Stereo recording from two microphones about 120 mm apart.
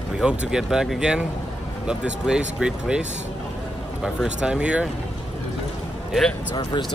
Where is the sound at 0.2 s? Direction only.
10° right (ahead or behind).